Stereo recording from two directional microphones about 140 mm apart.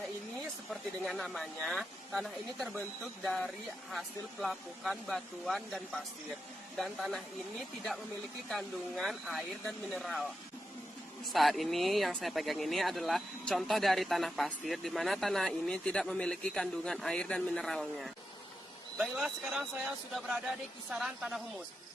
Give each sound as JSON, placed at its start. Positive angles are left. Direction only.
{"t": 0.7, "sound": "speech", "side_deg": 0}
{"t": 8.4, "sound": "speech", "side_deg": 0}
{"t": 11.3, "sound": "speech", "side_deg": 0}